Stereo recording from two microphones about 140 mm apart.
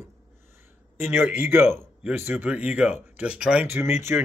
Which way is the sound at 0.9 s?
15° right (ahead or behind).